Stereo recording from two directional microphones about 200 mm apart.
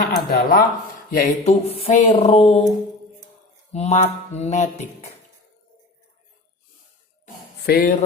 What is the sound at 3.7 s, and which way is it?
Mantra, 35° left (ahead or behind).